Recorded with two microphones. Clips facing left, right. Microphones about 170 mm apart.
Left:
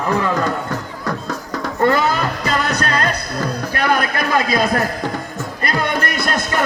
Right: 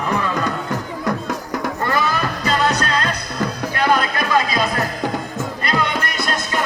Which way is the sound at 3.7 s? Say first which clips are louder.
Right 1 dB; 55° left (ahead or behind).